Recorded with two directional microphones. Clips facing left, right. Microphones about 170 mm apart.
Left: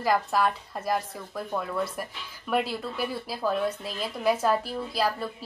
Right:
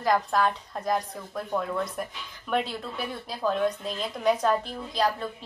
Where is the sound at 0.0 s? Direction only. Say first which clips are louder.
Even; 5° left (ahead or behind).